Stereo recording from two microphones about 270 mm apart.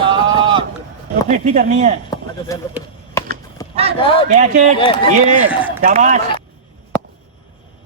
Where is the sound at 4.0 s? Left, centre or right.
Centre.